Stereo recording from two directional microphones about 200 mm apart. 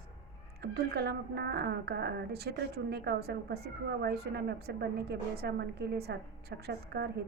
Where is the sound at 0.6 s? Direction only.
55° right (ahead or behind).